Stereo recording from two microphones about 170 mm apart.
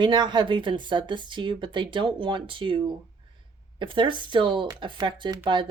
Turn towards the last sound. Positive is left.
turn(degrees=-30)  # may be behind; listen again after turning